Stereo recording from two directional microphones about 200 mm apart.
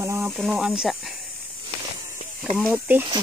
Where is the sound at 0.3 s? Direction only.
5° right (ahead or behind).